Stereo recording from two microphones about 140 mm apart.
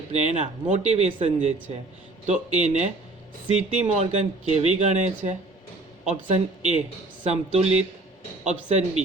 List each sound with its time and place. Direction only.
0.1 s speech: 55° right (ahead or behind)